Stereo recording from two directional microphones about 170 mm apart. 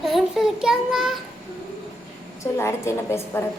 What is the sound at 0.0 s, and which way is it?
Child singing, centre (ahead or behind).